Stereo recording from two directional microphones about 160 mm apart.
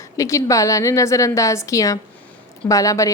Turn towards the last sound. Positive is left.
turn(degrees=20)  # may be behind; listen again after turning